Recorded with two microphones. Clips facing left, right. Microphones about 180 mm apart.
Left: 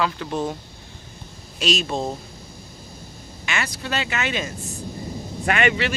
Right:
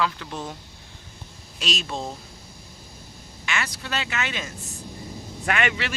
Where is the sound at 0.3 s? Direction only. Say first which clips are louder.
Left 8 dB; 45° left (ahead or behind).